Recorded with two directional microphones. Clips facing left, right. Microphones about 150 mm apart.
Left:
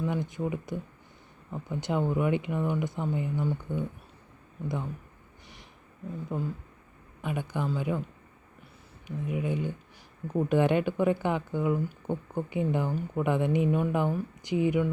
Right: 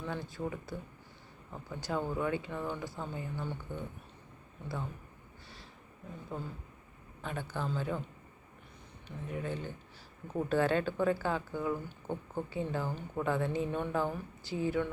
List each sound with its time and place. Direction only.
0.0 s speech: 15° left (ahead or behind)
6.3 s speech: 15° left (ahead or behind)
9.0 s speech: 10° left (ahead or behind)